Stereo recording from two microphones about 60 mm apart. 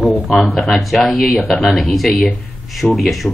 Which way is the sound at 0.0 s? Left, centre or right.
Centre.